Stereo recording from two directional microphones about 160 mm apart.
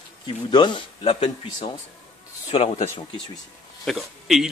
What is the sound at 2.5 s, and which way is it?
Speech, 40° left (ahead or behind).